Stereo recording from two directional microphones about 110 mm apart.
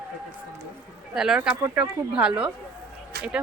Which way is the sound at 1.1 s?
5° right (ahead or behind).